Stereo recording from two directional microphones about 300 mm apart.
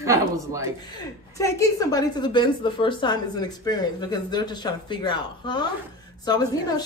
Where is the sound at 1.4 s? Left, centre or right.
Centre.